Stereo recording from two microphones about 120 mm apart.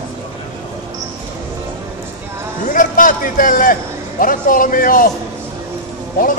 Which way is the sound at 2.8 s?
90° left.